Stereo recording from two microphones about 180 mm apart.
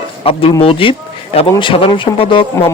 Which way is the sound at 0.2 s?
30° left (ahead or behind).